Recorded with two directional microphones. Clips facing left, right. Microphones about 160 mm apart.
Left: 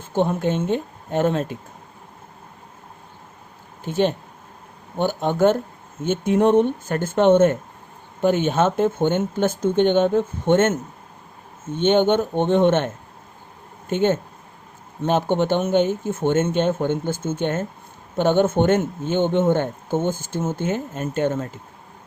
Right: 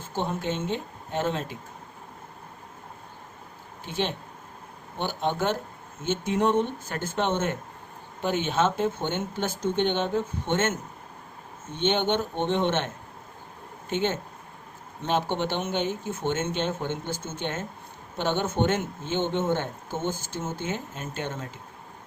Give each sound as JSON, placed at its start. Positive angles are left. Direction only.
{"t": 0.1, "sound": "speech", "side_deg": 55}
{"t": 3.8, "sound": "speech", "side_deg": 45}
{"t": 13.9, "sound": "speech", "side_deg": 50}